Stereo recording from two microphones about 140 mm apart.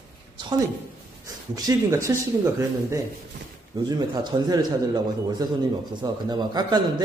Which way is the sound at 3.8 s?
30° right (ahead or behind).